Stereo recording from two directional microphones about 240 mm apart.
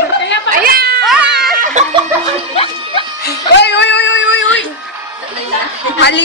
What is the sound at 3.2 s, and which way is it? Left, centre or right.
Music, left.